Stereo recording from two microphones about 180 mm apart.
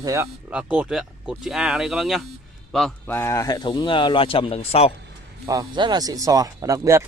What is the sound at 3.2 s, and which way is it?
Speech, 15° left (ahead or behind).